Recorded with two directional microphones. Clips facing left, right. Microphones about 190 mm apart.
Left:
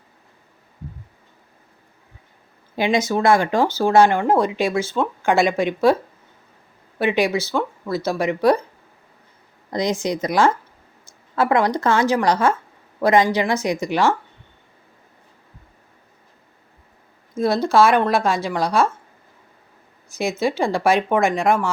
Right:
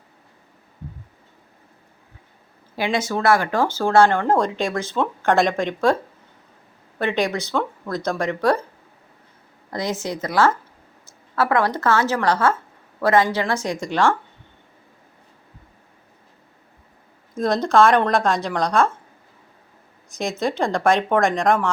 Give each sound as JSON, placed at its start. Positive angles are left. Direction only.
{"t": 2.7, "sound": "speech", "side_deg": 20}
{"t": 7.0, "sound": "speech", "side_deg": 10}
{"t": 9.6, "sound": "speech", "side_deg": 15}
{"t": 17.3, "sound": "speech", "side_deg": 5}
{"t": 20.1, "sound": "speech", "side_deg": 5}